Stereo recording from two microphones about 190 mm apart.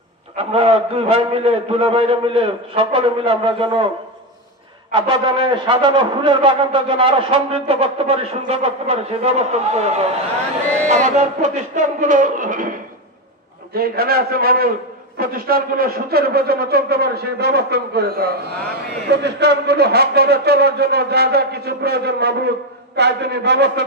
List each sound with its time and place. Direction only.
0.4 s a man's voice: 30° right (ahead or behind)
4.9 s a man's voice: 25° right (ahead or behind)
10.9 s music: 40° right (ahead or behind)
13.7 s music: 50° right (ahead or behind)
15.1 s a man's voice: 50° right (ahead or behind)